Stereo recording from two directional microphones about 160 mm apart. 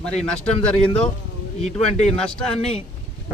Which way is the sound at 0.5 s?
35° left (ahead or behind).